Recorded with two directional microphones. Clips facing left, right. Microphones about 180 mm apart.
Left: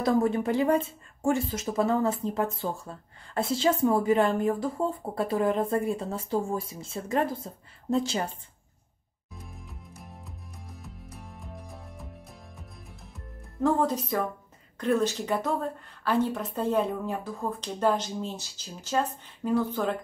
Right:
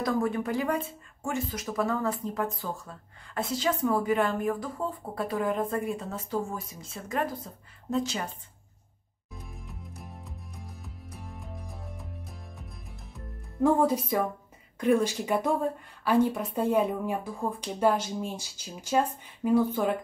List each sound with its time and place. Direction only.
0.0 s speech: 25° left (ahead or behind)
9.3 s music: centre (ahead or behind)
14.8 s a woman's voice: 10° right (ahead or behind)